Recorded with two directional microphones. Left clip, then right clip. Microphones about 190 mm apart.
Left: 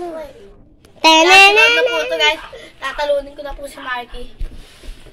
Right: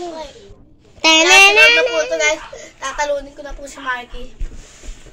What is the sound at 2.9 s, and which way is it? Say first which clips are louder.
A woman's voice: left 2 dB; 20° right (ahead or behind).